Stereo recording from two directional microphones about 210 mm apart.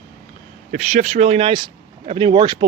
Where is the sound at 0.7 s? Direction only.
35° right (ahead or behind).